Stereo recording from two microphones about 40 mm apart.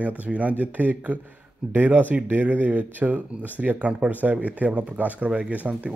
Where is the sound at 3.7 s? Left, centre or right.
Right.